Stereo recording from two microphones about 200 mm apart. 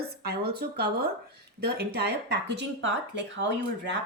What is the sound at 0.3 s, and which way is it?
Speech, 55° right (ahead or behind).